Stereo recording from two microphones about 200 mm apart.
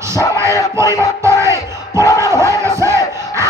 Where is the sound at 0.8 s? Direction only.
15° right (ahead or behind).